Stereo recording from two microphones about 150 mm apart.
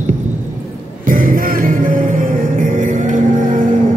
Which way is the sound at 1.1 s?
65° right (ahead or behind).